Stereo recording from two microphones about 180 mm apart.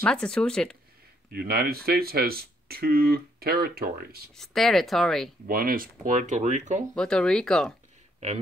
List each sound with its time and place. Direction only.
0.0 s speech: 5° left (ahead or behind)
1.3 s speech: 60° right (ahead or behind)
4.4 s speech: centre (ahead or behind)
5.5 s speech: 55° right (ahead or behind)
6.9 s speech: 5° left (ahead or behind)